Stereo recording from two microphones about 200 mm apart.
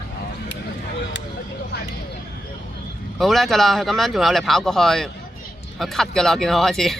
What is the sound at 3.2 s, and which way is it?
Speech, centre (ahead or behind).